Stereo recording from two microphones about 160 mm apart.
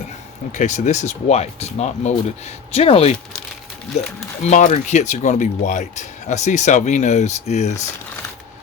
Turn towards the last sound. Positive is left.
turn(degrees=45)  # may be behind; listen again after turning